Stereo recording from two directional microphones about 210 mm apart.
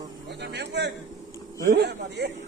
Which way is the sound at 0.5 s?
55° right (ahead or behind).